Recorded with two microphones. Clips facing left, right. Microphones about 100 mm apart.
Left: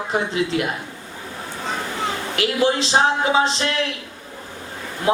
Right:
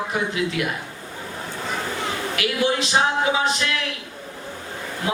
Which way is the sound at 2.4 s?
30° left (ahead or behind).